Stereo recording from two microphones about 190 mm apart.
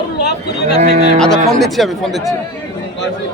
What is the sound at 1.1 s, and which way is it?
Speech, 5° left (ahead or behind).